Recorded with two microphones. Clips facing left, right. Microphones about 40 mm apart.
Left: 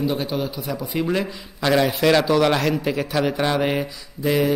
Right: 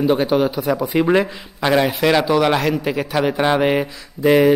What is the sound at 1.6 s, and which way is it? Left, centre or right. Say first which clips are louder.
A man's voice: right 2 dB; centre.